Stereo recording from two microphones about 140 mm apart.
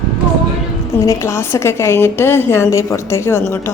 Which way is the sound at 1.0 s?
20° left (ahead or behind).